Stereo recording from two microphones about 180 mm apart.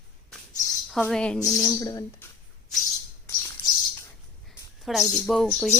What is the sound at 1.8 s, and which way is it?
Speech, 20° left (ahead or behind).